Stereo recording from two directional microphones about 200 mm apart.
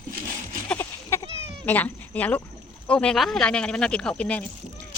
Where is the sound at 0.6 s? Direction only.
10° left (ahead or behind).